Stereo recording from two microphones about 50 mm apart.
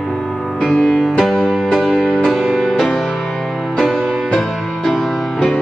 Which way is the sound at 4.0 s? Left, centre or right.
Centre.